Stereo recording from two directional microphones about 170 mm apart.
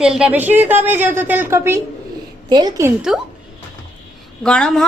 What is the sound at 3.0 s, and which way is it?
Speech, 5° right (ahead or behind).